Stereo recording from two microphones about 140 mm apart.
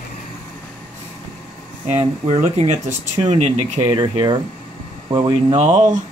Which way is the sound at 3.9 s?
35° right (ahead or behind).